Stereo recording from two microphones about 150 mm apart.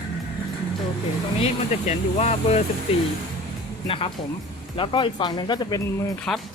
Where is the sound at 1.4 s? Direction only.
45° left (ahead or behind); by 5.8 s 30° left (ahead or behind).